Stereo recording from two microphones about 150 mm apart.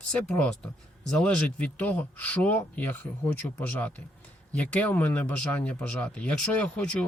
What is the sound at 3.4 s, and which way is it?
Speech, 20° left (ahead or behind).